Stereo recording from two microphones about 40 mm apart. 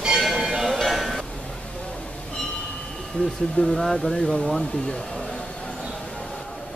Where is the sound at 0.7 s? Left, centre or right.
Centre.